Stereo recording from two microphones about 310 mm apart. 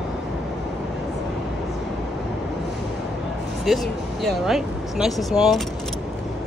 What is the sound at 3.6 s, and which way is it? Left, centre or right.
Speech, centre.